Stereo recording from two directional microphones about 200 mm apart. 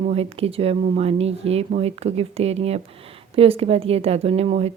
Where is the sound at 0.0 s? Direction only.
30° right (ahead or behind).